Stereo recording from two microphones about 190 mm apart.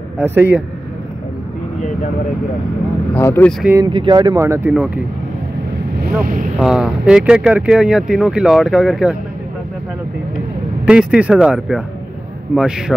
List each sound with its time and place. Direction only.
0.2 s speech: 10° right (ahead or behind)
3.2 s speech: 10° left (ahead or behind)
3.8 s speech: 25° right (ahead or behind); by 5.0 s 5° right (ahead or behind)
6.6 s speech: 5° right (ahead or behind)
10.9 s speech: 5° right (ahead or behind)